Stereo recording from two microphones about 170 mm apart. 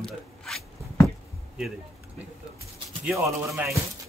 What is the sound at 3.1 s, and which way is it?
Speech, centre (ahead or behind).